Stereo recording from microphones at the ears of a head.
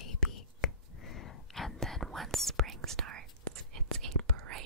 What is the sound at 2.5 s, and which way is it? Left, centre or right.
Whispering, right.